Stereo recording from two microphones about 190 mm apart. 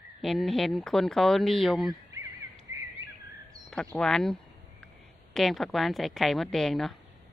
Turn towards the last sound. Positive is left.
turn(degrees=0)  # may be behind; listen again after turning